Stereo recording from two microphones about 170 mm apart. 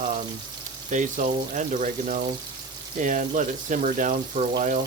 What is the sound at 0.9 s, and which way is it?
Speech, 45° right (ahead or behind).